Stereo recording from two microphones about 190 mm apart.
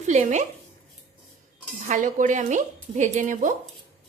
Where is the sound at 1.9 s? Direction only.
40° right (ahead or behind).